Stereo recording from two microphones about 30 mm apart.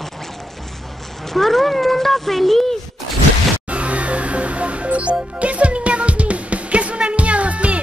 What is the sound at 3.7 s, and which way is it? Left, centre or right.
Music, right.